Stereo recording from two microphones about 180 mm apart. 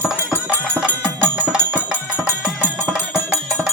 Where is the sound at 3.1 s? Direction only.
Centre (ahead or behind).